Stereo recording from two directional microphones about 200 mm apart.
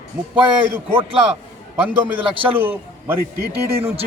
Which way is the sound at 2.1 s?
25° right (ahead or behind).